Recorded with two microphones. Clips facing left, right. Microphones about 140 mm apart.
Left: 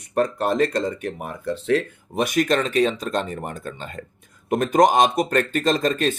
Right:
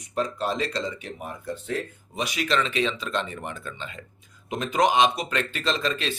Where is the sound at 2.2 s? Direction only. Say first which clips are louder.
Left 6 dB; 50° left (ahead or behind).